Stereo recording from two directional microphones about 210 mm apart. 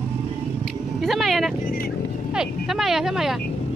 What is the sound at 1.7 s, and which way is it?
Vehicle, 45° left (ahead or behind).